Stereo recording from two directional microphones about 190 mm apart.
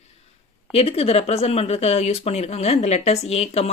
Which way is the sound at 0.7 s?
30° left (ahead or behind).